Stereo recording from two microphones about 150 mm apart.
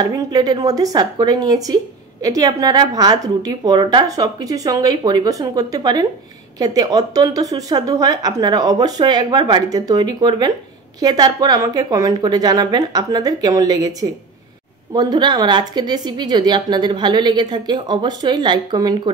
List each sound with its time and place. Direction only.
0.0 s speech: 30° right (ahead or behind)